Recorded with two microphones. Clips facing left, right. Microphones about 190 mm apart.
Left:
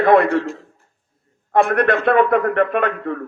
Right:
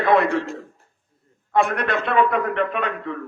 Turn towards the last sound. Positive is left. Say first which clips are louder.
# left 6 dB
turn(degrees=50)  # may be behind; listen again after turning